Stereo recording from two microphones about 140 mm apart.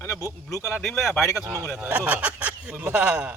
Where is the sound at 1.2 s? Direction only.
25° left (ahead or behind).